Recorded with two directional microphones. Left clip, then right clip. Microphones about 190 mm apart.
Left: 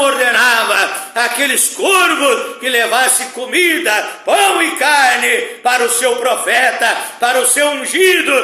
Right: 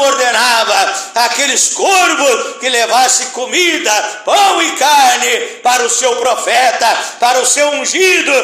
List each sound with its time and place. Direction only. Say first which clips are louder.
0.0 s a man's voice: right 1 dB; 20° left (ahead or behind)